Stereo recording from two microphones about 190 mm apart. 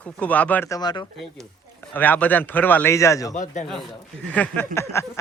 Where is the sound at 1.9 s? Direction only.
10° left (ahead or behind).